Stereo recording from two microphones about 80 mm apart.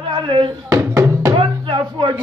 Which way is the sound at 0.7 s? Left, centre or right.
Right.